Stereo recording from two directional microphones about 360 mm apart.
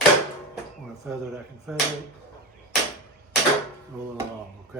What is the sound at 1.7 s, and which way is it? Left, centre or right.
Speech, centre.